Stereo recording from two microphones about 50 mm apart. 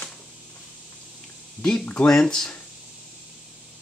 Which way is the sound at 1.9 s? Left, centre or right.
Centre.